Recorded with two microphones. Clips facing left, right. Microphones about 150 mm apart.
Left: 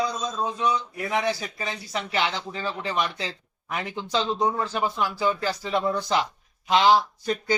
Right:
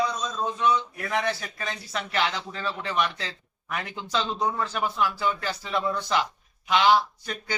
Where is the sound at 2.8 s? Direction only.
30° left (ahead or behind).